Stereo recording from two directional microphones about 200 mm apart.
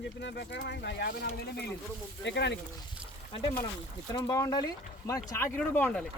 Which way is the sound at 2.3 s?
60° left (ahead or behind).